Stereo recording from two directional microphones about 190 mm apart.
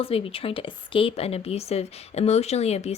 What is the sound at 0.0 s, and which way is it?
Speech, 30° left (ahead or behind).